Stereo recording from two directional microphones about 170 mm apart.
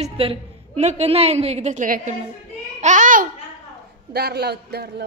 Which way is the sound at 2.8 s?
45° right (ahead or behind).